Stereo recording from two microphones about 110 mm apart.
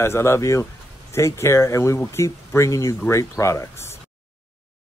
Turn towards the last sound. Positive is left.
turn(degrees=25)  # may be behind; listen again after turning